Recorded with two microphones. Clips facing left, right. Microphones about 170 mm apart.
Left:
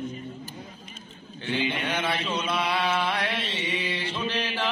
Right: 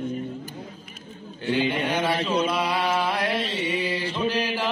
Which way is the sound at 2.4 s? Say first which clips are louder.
Right 3 dB; 10° right (ahead or behind).